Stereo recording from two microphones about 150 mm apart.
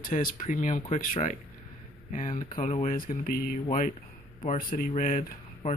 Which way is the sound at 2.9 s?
75° left (ahead or behind).